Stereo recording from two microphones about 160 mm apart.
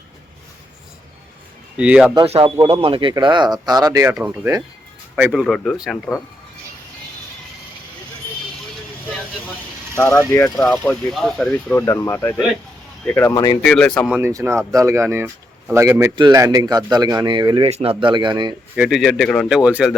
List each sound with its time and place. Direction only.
1.7 s speech: 5° right (ahead or behind)
2.2 s speech: 40° right (ahead or behind); by 4.1 s 20° right (ahead or behind)
4.1 s speech: 10° right (ahead or behind)
10.3 s speech: 15° left (ahead or behind)
10.8 s speech: 5° left (ahead or behind)
13.3 s speech: 25° left (ahead or behind)
13.7 s speech: 5° left (ahead or behind)
14.1 s speech: 15° right (ahead or behind)
18.8 s speech: centre (ahead or behind)